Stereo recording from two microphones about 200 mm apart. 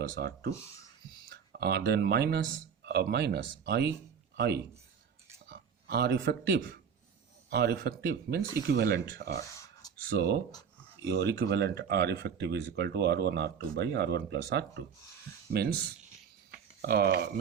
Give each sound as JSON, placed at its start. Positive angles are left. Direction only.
{"t": 0.2, "sound": "a man's voice", "side_deg": -50}